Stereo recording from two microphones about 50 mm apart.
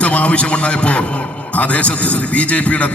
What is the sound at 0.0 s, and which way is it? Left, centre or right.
A man's voice, left.